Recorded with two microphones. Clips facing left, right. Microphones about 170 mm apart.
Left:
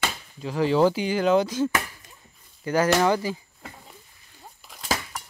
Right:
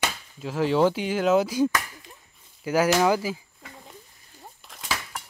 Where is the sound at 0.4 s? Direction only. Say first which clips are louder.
Left 1 dB; centre (ahead or behind).